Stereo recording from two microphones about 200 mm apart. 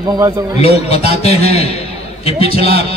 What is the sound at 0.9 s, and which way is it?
Speech, 30° left (ahead or behind).